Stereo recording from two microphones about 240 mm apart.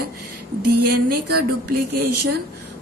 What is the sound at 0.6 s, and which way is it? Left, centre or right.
Speech, right.